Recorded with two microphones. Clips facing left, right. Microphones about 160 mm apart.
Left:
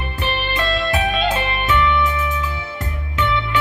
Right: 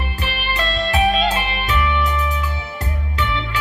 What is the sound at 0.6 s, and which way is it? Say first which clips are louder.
Music: right 2 dB; 40° right (ahead or behind).